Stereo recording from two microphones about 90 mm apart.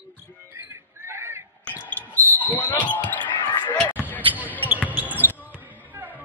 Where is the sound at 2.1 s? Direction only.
20° left (ahead or behind).